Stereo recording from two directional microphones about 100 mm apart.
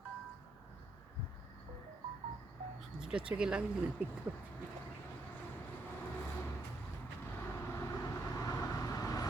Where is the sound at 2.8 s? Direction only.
5° right (ahead or behind).